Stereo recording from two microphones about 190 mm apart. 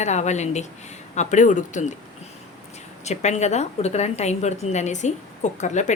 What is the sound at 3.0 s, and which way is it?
A woman's voice, 35° left (ahead or behind).